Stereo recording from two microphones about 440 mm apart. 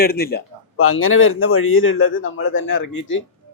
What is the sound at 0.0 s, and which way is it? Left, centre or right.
Speech, left.